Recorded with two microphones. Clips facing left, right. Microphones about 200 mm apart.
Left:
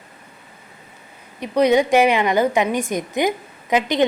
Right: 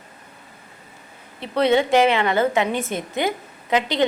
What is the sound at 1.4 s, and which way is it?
A woman's voice, 15° left (ahead or behind).